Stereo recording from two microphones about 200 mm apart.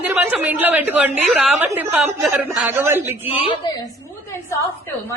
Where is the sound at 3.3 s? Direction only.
30° left (ahead or behind).